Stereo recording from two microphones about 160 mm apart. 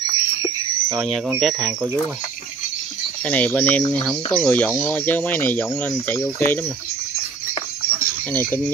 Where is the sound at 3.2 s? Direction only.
10° left (ahead or behind).